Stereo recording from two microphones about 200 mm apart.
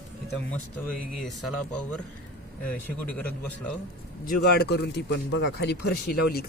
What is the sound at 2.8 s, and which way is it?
Speech, 5° left (ahead or behind).